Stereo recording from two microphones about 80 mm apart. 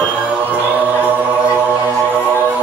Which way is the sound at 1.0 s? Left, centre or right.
Right.